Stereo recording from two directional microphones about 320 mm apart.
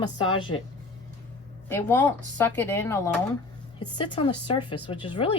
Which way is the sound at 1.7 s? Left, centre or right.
Centre.